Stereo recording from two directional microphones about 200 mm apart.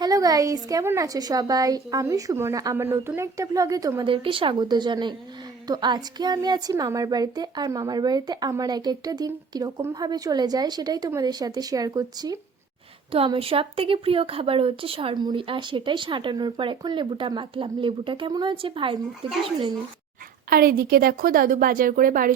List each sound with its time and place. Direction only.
0.0 s a woman's voice: 20° right (ahead or behind)
20.5 s a woman's voice: 50° right (ahead or behind)